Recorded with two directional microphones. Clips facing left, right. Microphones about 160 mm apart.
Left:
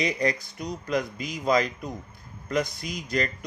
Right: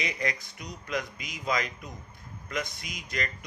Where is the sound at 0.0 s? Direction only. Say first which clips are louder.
Left 7 dB; 35° left (ahead or behind).